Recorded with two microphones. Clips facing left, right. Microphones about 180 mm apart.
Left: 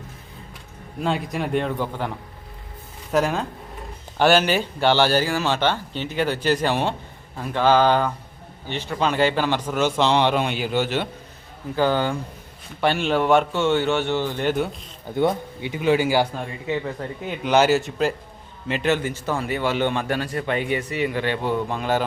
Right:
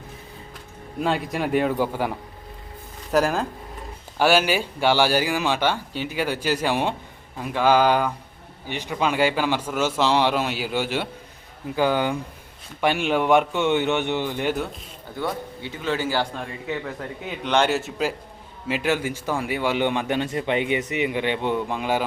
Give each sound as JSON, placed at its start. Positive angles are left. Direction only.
{"t": 0.9, "sound": "a man's voice", "side_deg": 0}
{"t": 15.1, "sound": "a man's voice", "side_deg": 20}